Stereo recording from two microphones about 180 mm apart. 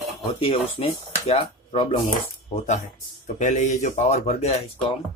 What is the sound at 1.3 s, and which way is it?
Speech, 30° left (ahead or behind).